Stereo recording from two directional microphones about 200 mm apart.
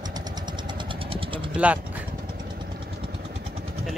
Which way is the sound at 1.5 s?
5° right (ahead or behind).